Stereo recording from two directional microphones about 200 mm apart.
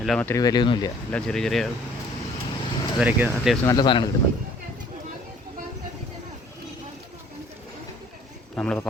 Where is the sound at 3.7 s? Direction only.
20° left (ahead or behind).